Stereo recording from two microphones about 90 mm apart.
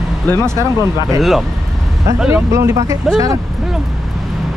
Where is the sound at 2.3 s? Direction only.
35° right (ahead or behind).